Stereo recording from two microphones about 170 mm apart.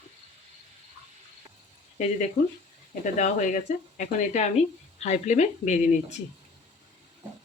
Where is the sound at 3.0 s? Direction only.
45° left (ahead or behind).